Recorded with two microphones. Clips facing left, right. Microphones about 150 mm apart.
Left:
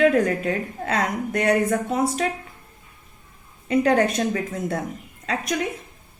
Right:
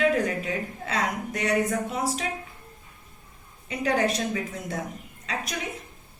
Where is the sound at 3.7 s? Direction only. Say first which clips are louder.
Left 6 dB; 55° left (ahead or behind).